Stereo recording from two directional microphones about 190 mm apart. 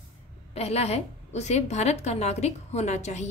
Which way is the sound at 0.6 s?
35° left (ahead or behind).